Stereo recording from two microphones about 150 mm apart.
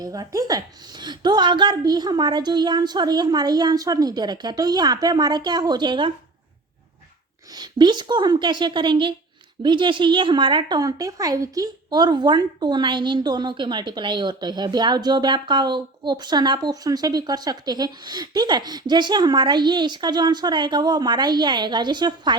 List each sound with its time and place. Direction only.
0.0 s a woman's voice: 25° right (ahead or behind)
7.5 s a woman's voice: 30° right (ahead or behind)